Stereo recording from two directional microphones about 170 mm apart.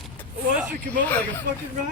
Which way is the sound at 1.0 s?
10° left (ahead or behind).